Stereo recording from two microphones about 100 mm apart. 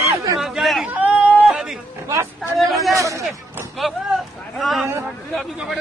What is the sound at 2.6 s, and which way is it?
Speech, centre (ahead or behind).